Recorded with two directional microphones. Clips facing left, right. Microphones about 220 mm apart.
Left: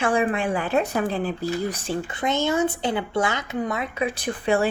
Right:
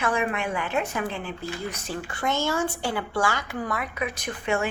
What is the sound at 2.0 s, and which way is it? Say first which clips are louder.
Speech: left 2 dB; 20° left (ahead or behind).